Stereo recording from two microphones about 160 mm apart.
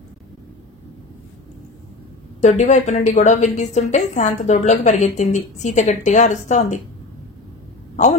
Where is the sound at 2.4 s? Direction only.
45° left (ahead or behind).